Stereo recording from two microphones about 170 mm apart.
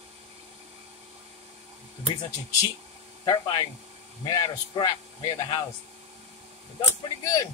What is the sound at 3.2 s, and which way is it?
Speech, 25° left (ahead or behind).